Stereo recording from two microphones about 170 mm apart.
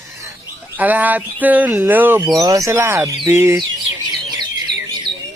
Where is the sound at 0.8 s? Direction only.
10° right (ahead or behind).